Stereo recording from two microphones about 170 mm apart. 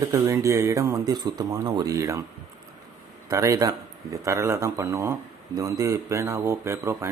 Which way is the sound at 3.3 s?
20° right (ahead or behind).